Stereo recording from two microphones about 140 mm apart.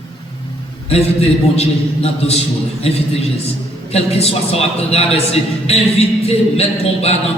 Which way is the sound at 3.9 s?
45° left (ahead or behind).